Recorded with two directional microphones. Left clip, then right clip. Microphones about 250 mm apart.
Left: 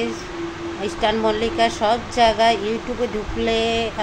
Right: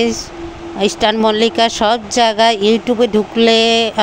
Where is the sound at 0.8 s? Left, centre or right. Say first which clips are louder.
Right 7 dB; right.